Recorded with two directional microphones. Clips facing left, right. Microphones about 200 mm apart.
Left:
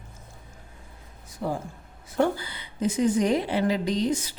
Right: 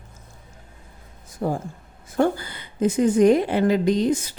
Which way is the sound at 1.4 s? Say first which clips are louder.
Right 4 dB; 45° right (ahead or behind).